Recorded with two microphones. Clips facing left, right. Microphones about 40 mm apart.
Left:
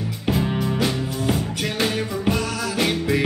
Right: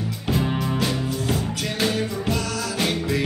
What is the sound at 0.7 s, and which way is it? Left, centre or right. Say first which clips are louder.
Music: left 1 dB; centre.